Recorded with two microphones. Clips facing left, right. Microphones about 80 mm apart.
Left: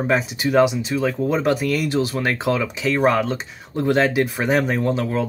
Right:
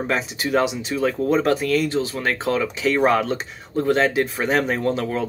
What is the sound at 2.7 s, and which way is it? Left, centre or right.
Speech, centre.